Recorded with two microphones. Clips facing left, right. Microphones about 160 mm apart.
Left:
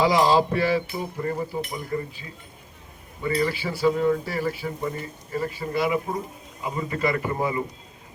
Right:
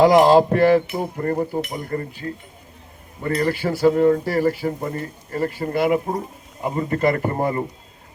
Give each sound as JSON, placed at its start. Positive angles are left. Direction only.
{"t": 0.0, "sound": "speech", "side_deg": -50}